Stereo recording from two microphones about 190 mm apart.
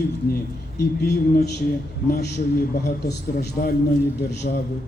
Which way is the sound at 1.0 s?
60° left (ahead or behind).